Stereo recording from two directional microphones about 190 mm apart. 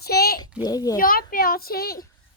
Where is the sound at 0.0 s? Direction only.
55° left (ahead or behind).